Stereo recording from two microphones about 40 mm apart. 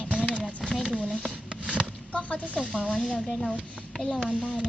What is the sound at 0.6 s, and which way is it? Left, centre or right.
Speech, centre.